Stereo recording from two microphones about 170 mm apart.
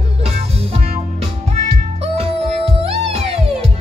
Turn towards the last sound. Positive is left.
turn(degrees=-35)  # may be behind; listen again after turning